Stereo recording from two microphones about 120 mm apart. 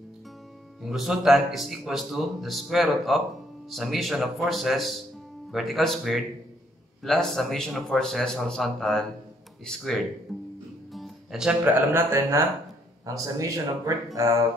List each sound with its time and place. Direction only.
0.8 s a man's voice: 5° right (ahead or behind)
10.9 s music: centre (ahead or behind)
11.6 s speech: 15° right (ahead or behind)